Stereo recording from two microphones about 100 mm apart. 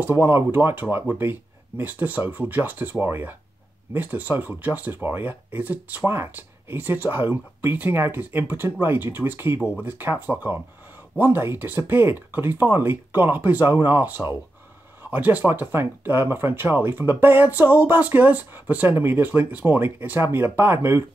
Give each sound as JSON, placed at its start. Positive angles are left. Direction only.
{"t": 0.0, "sound": "speech", "side_deg": -20}